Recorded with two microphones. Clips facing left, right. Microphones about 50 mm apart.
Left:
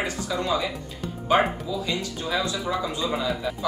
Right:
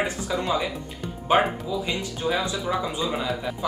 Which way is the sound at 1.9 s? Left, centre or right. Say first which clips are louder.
Right 2 dB; right.